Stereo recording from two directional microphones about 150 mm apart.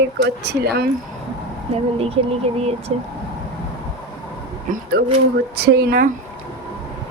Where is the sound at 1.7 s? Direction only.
40° right (ahead or behind).